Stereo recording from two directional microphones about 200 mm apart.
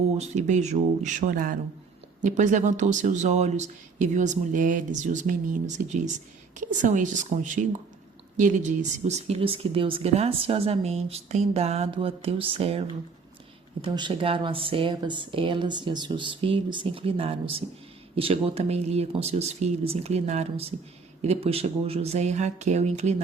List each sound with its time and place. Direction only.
0.2 s speech: 35° right (ahead or behind)